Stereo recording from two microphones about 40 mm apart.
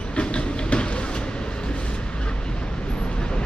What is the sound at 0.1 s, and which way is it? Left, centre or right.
Train, left.